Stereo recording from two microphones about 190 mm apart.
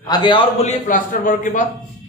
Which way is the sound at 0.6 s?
40° left (ahead or behind).